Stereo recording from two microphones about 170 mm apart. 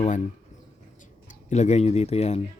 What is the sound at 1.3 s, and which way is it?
Speech, 45° left (ahead or behind).